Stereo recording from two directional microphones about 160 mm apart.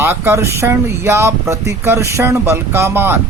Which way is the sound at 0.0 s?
15° right (ahead or behind).